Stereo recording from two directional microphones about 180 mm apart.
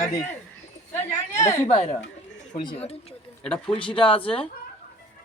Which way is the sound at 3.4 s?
5° left (ahead or behind).